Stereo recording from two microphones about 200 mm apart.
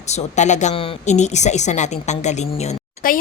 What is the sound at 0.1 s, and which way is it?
A woman's voice, 35° left (ahead or behind).